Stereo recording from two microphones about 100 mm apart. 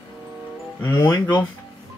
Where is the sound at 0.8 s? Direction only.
35° left (ahead or behind).